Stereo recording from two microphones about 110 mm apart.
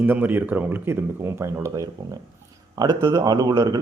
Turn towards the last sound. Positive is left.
turn(degrees=-30)  # may be behind; listen again after turning